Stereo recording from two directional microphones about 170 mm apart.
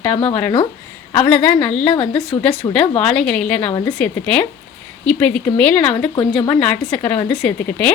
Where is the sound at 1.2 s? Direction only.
5° left (ahead or behind).